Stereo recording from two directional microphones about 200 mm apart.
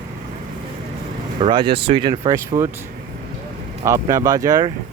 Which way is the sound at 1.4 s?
25° right (ahead or behind).